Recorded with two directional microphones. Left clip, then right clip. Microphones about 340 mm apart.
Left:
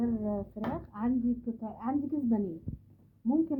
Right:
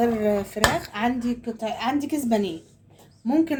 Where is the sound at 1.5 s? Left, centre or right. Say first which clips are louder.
Right 10 dB; centre.